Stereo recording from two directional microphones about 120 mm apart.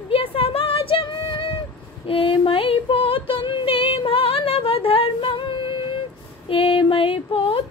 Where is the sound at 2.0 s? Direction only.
50° left (ahead or behind).